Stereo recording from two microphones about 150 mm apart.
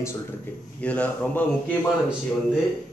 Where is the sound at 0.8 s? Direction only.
10° left (ahead or behind).